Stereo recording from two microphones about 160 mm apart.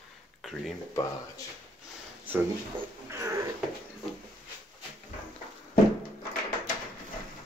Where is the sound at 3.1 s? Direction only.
20° right (ahead or behind).